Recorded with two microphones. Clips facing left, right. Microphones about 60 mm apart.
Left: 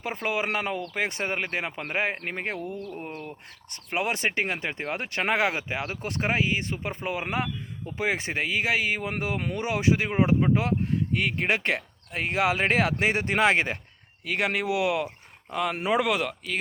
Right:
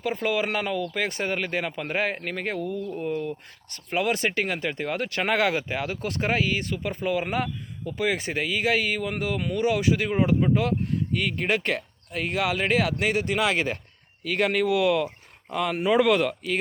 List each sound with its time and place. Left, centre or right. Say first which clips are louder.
0.0 s speech: right 3 dB; left
14.3 s speech: right 3 dB; centre
15.7 s speech: right 4 dB; left
16.0 s speech: right 5 dB; centre